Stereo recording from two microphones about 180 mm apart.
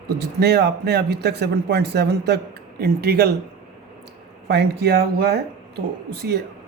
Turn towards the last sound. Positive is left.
turn(degrees=-65)  # may be behind; listen again after turning